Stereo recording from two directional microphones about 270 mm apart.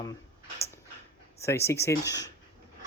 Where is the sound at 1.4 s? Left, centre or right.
Centre.